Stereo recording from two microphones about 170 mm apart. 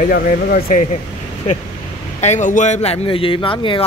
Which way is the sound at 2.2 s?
45° left (ahead or behind).